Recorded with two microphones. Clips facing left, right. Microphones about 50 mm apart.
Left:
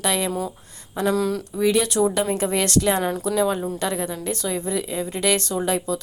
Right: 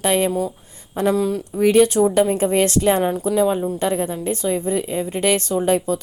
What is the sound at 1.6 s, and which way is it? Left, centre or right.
Speech, right.